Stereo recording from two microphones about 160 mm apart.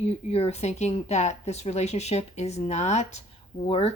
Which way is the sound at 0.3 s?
40° left (ahead or behind).